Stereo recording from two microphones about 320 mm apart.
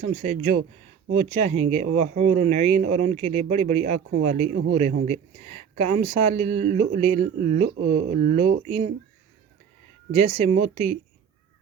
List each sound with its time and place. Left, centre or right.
0.0 s speech: right
10.1 s speech: right